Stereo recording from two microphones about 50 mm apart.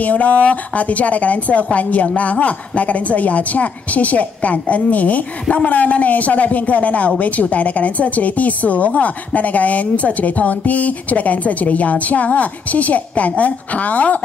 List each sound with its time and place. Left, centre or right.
0.0 s a woman's voice: left